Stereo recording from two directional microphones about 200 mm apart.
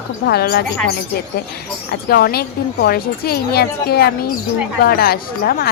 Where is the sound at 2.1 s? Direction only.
50° left (ahead or behind).